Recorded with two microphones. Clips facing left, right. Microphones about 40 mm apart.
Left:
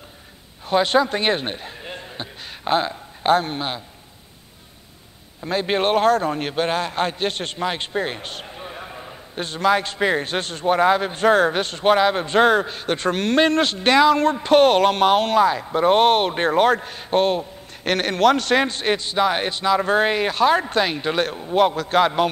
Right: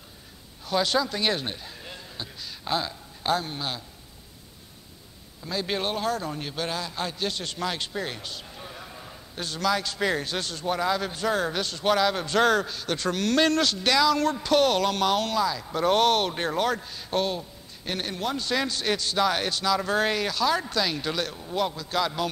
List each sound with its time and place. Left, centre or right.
0.7 s speech: left
5.4 s a man's voice: left
8.5 s a man's voice: left
15.6 s a man's voice: left
17.8 s a man's voice: left
18.6 s a man's voice: left